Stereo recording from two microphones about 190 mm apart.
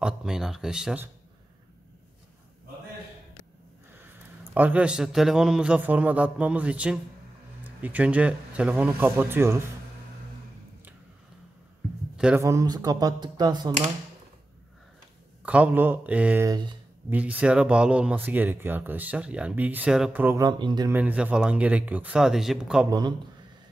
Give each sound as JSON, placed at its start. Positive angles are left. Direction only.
{"t": 0.0, "sound": "a sound", "side_deg": -5}
{"t": 4.6, "sound": "speech", "side_deg": -10}
{"t": 12.4, "sound": "speech", "side_deg": -15}
{"t": 15.4, "sound": "speech", "side_deg": -5}
{"t": 16.4, "sound": "speech", "side_deg": -25}
{"t": 17.1, "sound": "speech", "side_deg": -10}
{"t": 20.9, "sound": "speech", "side_deg": -10}
{"t": 22.8, "sound": "speech", "side_deg": -20}